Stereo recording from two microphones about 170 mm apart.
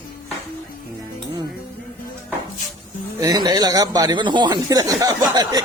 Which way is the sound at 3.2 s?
20° right (ahead or behind).